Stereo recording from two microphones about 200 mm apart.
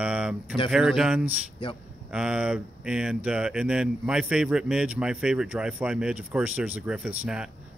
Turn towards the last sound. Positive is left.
turn(degrees=-5)  # may be behind; listen again after turning